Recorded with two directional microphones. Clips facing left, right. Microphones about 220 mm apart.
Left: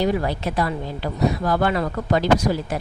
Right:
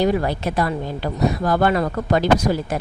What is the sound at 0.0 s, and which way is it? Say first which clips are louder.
A woman's voice: right 2 dB; 50° right (ahead or behind).